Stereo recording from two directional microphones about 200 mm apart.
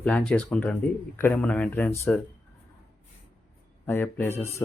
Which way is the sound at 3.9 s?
10° left (ahead or behind).